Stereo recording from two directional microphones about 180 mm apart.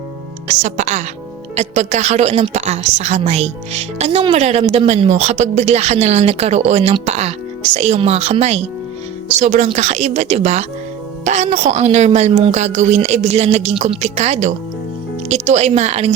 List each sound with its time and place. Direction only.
0.4 s a woman's voice: 40° right (ahead or behind)